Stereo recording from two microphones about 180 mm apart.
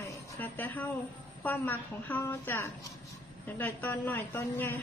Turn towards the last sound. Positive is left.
turn(degrees=10)  # may be behind; listen again after turning